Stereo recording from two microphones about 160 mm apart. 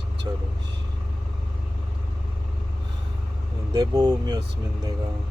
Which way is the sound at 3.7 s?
25° right (ahead or behind).